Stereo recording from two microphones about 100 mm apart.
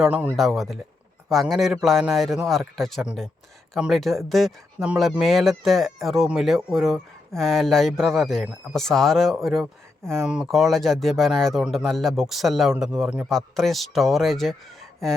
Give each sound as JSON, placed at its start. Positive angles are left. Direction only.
{"t": 0.0, "sound": "a man's voice", "side_deg": -15}
{"t": 0.3, "sound": "speech", "side_deg": 0}
{"t": 13.2, "sound": "speech", "side_deg": 5}